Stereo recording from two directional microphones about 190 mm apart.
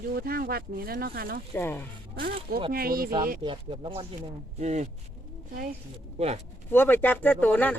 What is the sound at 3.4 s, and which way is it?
Speech, 25° right (ahead or behind).